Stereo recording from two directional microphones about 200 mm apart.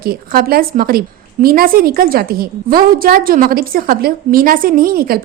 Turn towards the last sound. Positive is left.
turn(degrees=-45)  # may be behind; listen again after turning